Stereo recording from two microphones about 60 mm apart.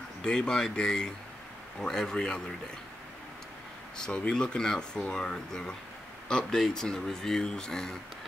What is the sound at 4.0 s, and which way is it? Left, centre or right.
Speech, centre.